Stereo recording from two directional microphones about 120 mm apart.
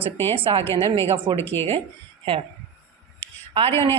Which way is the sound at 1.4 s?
20° left (ahead or behind).